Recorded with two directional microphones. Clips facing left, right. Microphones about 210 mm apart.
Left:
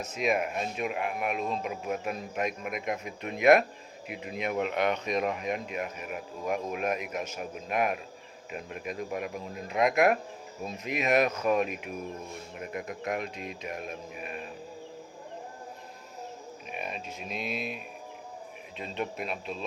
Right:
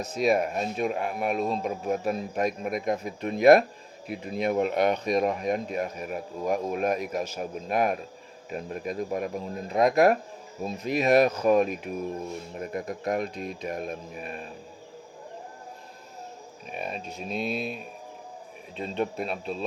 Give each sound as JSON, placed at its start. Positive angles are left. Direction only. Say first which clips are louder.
{"t": 0.0, "sound": "speech", "louder": "right 5 dB", "side_deg": -35}
{"t": 16.7, "sound": "speech", "louder": "right 4 dB", "side_deg": -35}
{"t": 18.8, "sound": "speech", "louder": "right 5 dB", "side_deg": -35}